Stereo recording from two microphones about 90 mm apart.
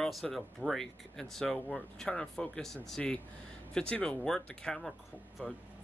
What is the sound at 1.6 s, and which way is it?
Speech, 20° left (ahead or behind).